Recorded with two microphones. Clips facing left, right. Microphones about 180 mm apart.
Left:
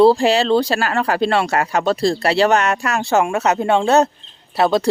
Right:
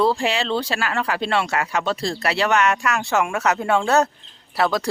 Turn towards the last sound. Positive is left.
turn(degrees=25)  # may be behind; listen again after turning